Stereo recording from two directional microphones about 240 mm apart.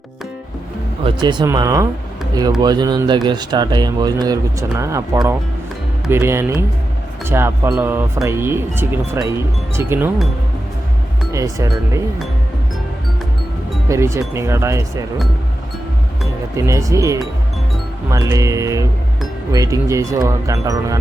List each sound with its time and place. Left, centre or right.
1.0 s speech: centre
11.3 s speech: centre
13.8 s speech: centre
16.6 s speech: centre